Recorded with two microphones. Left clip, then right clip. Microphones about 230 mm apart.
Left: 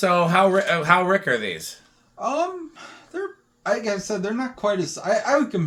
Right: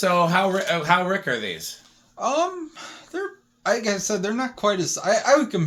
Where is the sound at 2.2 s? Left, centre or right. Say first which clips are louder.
Right 1 dB; right.